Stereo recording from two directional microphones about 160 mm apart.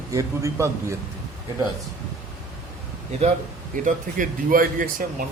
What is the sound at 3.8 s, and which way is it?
Speech, 55° right (ahead or behind).